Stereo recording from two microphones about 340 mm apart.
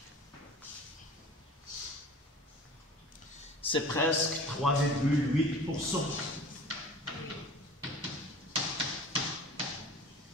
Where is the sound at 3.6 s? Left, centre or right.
Centre.